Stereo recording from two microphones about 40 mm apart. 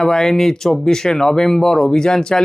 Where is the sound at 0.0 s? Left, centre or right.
Centre.